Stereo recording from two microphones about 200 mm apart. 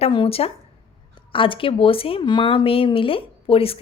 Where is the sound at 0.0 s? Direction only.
25° left (ahead or behind).